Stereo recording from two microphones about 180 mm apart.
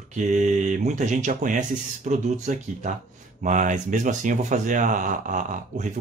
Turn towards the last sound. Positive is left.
turn(degrees=-45)  # may be behind; listen again after turning